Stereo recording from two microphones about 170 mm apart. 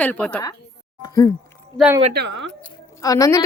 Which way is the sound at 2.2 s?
90° right.